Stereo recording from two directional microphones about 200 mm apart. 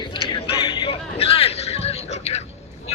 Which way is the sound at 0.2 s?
25° left (ahead or behind).